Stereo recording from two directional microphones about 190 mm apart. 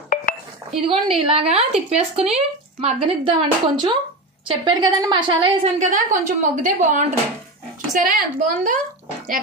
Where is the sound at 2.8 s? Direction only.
25° right (ahead or behind).